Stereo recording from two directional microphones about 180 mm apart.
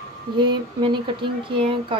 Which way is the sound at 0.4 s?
25° right (ahead or behind).